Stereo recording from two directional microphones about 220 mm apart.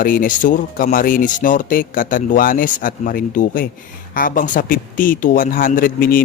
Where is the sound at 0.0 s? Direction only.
40° left (ahead or behind).